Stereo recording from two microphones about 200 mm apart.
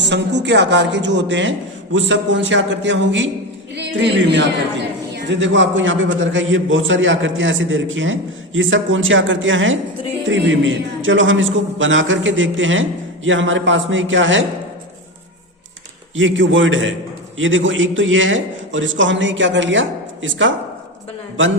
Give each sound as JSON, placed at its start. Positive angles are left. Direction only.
{"t": 0.0, "sound": "a man's voice", "side_deg": -60}
{"t": 16.1, "sound": "a man's voice", "side_deg": -70}